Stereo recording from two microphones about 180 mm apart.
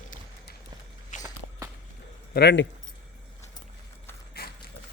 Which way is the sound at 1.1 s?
45° left (ahead or behind).